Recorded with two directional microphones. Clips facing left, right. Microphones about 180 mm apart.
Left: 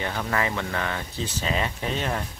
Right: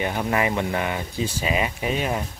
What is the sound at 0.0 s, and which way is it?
Speech, 15° right (ahead or behind).